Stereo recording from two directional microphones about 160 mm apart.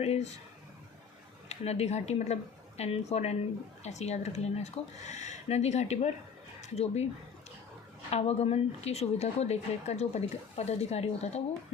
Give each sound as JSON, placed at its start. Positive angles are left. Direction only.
{"t": 0.0, "sound": "speech", "side_deg": 40}
{"t": 1.5, "sound": "speech", "side_deg": 40}
{"t": 8.1, "sound": "speech", "side_deg": 40}